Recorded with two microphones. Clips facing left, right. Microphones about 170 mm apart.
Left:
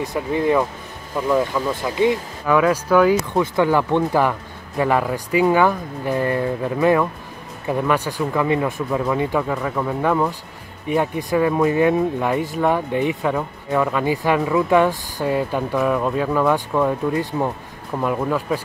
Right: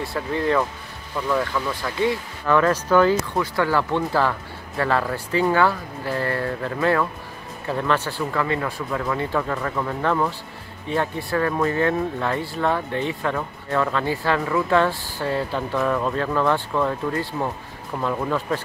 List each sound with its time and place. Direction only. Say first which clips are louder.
0.0 s speech: left 4 dB; 15° left (ahead or behind)